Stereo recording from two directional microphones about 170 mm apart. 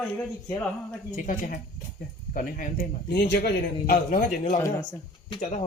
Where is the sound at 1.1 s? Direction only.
50° left (ahead or behind).